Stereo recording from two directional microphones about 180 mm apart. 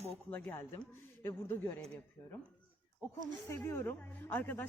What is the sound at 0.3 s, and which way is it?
A man's voice, 10° left (ahead or behind).